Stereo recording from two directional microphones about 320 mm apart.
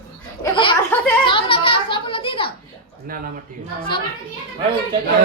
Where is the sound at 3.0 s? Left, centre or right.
Right.